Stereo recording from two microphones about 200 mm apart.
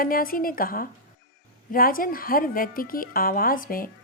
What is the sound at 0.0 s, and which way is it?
A woman's voice, 45° left (ahead or behind).